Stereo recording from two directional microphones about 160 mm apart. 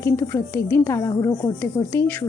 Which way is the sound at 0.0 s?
15° left (ahead or behind).